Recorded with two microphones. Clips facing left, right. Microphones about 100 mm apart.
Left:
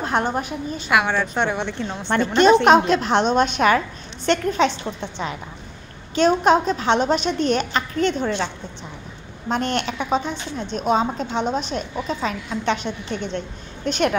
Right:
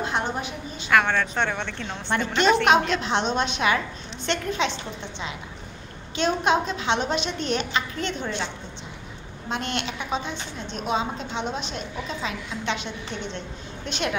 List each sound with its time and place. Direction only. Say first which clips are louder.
0.0 s a woman's voice: left 5 dB; 45° left (ahead or behind)
0.8 s a woman's voice: left 1 dB; 10° left (ahead or behind)
2.0 s a woman's voice: left 6 dB; 40° left (ahead or behind)
6.1 s a woman's voice: left 6 dB; 40° left (ahead or behind)
9.5 s a woman's voice: left 6 dB; 40° left (ahead or behind)